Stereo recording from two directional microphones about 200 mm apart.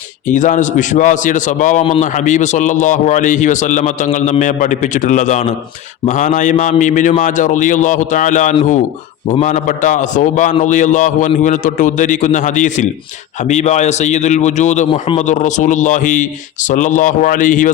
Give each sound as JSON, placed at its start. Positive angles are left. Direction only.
{"t": 0.3, "sound": "a man's voice", "side_deg": 40}